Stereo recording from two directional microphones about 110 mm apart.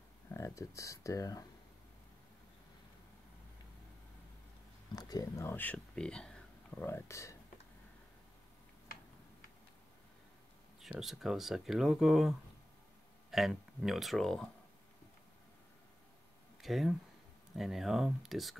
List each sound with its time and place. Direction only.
0.3 s speech: 25° left (ahead or behind)
4.9 s speech: 35° left (ahead or behind); by 6.9 s 10° left (ahead or behind)
6.9 s speech: 25° left (ahead or behind)
11.0 s speech: 5° right (ahead or behind)
16.6 s speech: centre (ahead or behind)